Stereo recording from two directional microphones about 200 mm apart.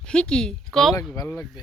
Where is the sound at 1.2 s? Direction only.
15° left (ahead or behind).